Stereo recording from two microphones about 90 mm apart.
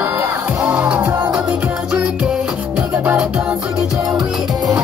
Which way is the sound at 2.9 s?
20° right (ahead or behind).